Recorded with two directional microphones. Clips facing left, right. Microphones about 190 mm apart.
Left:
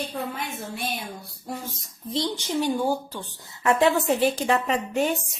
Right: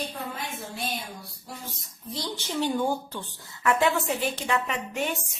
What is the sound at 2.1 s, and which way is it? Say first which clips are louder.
A woman's voice: left 6 dB; 20° left (ahead or behind).